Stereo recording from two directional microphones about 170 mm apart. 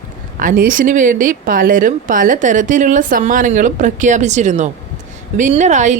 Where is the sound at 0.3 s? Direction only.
55° right (ahead or behind).